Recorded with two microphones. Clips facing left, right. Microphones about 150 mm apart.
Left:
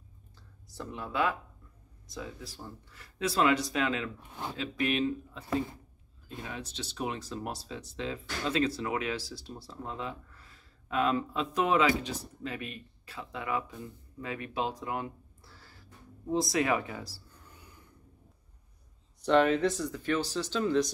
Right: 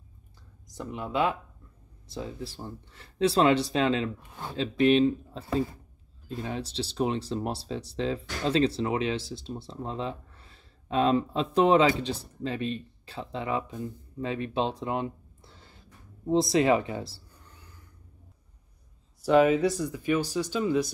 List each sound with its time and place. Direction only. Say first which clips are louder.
0.7 s speech: right 4 dB; 15° right (ahead or behind)
19.2 s speech: right 3 dB; 5° right (ahead or behind)